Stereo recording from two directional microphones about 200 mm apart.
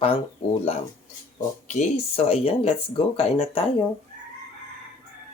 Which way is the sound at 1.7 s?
35° left (ahead or behind).